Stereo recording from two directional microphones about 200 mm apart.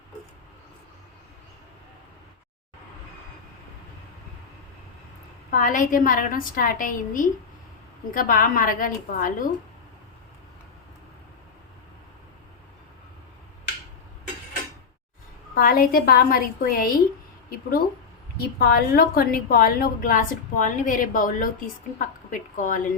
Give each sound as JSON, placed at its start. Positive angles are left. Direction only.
{"t": 5.5, "sound": "a woman's voice", "side_deg": 40}
{"t": 15.5, "sound": "a woman's voice", "side_deg": 45}
{"t": 18.6, "sound": "a woman's voice", "side_deg": 50}